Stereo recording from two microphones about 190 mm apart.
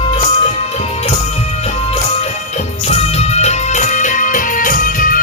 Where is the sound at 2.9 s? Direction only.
35° left (ahead or behind).